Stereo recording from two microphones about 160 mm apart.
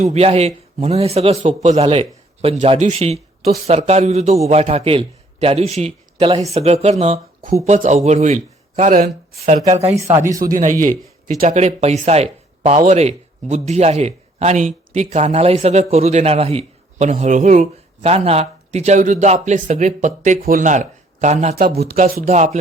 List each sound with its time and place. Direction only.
0.0 s a man's voice: 40° right (ahead or behind)
9.9 s speech: 20° right (ahead or behind)
10.4 s speech: 55° right (ahead or behind)
21.8 s speech: 65° right (ahead or behind); by 22.5 s 45° right (ahead or behind)